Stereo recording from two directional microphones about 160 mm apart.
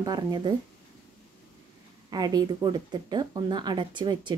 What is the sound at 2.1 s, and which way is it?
Speech, 25° right (ahead or behind).